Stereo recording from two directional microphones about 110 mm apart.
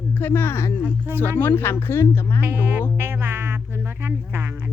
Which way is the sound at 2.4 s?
20° right (ahead or behind).